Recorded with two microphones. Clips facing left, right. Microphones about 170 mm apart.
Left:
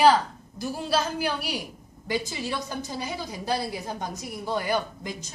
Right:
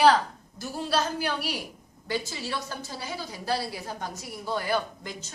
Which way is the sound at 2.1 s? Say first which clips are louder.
Left 2 dB; 15° left (ahead or behind).